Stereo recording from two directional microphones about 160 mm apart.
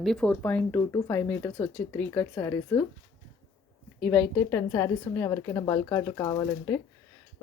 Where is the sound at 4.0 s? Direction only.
5° left (ahead or behind).